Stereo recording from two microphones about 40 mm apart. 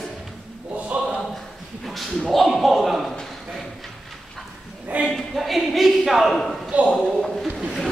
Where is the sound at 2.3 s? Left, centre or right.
Centre.